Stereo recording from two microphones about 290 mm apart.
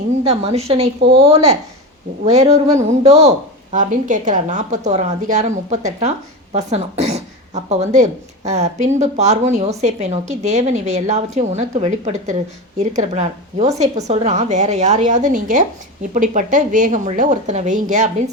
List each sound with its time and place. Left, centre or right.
0.3 s a woman's voice: right